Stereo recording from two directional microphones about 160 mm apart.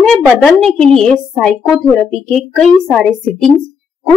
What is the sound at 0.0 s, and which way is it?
A woman's voice, 5° left (ahead or behind).